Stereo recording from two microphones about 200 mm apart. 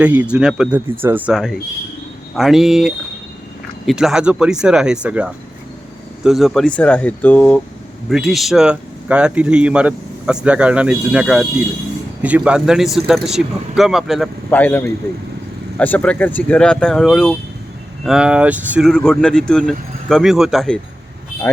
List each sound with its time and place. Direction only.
0.0 s speech: 5° right (ahead or behind)
14.5 s speech: 10° left (ahead or behind)
21.5 s speech: 10° left (ahead or behind)